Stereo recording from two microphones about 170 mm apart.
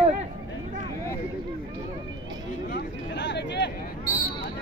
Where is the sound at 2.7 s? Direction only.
85° left.